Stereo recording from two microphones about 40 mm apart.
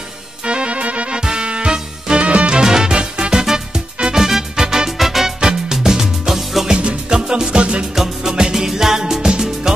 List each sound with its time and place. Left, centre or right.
0.5 s music: right
2.5 s music: centre
5.4 s music: centre
7.9 s music: centre